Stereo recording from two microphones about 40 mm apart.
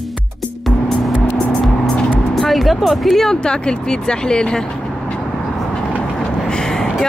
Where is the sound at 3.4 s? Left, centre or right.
Left.